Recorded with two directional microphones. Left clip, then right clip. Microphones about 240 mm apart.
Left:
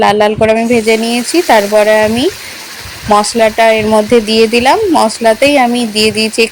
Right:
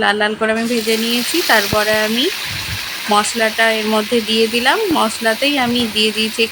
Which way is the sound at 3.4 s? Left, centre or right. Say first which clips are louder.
Left 7 dB; centre.